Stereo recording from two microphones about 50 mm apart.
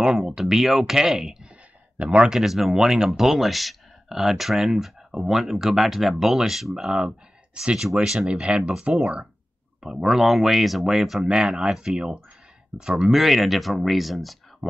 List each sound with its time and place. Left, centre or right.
0.0 s speech: centre
12.7 s speech: right
13.1 s speech: centre